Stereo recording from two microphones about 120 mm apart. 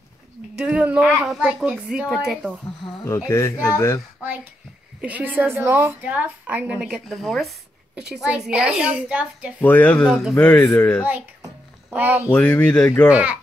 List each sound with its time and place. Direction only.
0.6 s a woman's voice: 10° right (ahead or behind)
3.1 s speech: 20° left (ahead or behind)
5.0 s a woman's voice: 15° right (ahead or behind)
7.1 s a woman's voice: centre (ahead or behind)
9.6 s speech: 15° left (ahead or behind)
10.0 s speech: centre (ahead or behind)
10.3 s speech: 15° left (ahead or behind)
11.9 s a woman's voice: 15° right (ahead or behind)
12.3 s speech: 15° left (ahead or behind)
13.1 s a woman's voice: 10° right (ahead or behind)